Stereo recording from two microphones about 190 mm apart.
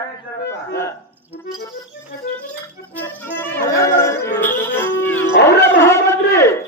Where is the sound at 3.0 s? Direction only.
10° left (ahead or behind).